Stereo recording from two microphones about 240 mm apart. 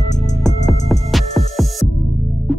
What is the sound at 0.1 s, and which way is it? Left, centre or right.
Music, left.